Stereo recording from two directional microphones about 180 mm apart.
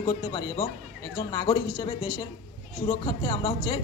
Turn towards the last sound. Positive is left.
turn(degrees=25)  # may be behind; listen again after turning